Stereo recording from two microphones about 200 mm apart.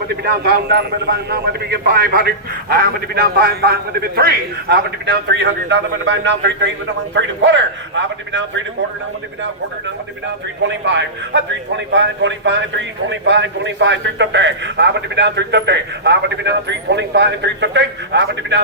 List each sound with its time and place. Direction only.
0.3 s a man's voice: 55° right (ahead or behind)
10.6 s a man's voice: 65° right (ahead or behind)